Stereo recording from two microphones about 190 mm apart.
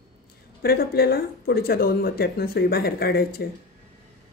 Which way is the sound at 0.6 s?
55° left (ahead or behind).